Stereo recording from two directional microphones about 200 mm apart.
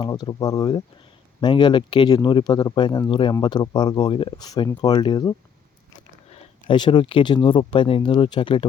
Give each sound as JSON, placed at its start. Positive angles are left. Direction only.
{"t": 0.0, "sound": "speech", "side_deg": 20}
{"t": 6.3, "sound": "speech", "side_deg": 25}